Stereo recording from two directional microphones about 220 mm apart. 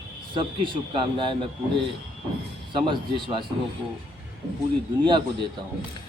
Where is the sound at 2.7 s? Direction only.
20° right (ahead or behind).